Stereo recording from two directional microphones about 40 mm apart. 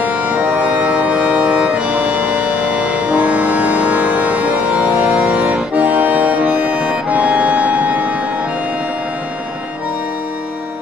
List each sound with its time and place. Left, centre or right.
0.0 s organ: right
0.3 s music: right
5.0 s accordion: right
6.6 s music: right